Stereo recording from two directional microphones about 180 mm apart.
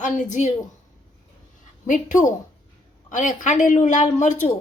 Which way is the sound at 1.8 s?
45° left (ahead or behind).